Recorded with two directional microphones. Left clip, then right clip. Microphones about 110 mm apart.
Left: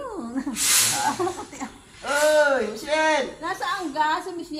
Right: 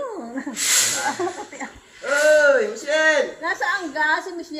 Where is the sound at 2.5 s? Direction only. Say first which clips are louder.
Right 4 dB; 20° left (ahead or behind).